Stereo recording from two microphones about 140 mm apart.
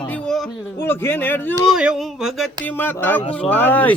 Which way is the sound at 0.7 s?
15° left (ahead or behind).